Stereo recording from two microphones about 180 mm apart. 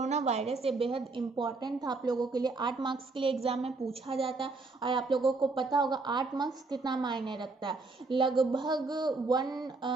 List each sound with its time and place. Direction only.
0.0 s a woman's voice: 40° right (ahead or behind); by 9.6 s 20° right (ahead or behind)